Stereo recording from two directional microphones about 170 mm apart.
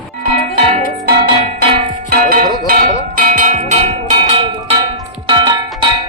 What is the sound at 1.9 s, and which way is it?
Music, 60° right (ahead or behind).